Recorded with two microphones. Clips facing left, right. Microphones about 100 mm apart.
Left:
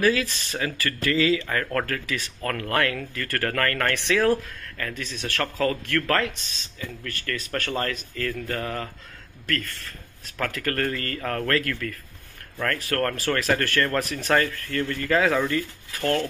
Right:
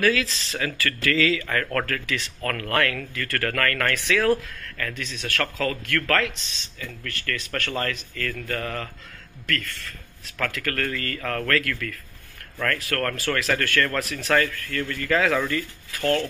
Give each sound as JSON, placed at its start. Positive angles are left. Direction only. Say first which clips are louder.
{"t": 0.0, "sound": "speech", "louder": "even", "side_deg": 20}